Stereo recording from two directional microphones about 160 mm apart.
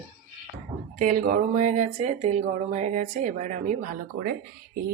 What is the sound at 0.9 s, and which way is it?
Speech, 65° right (ahead or behind).